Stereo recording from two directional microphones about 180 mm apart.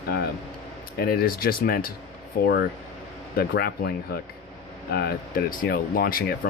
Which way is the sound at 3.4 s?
55° left (ahead or behind).